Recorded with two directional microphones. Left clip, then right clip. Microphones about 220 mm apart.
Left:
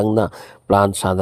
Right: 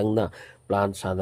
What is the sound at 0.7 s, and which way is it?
Speech, 40° left (ahead or behind).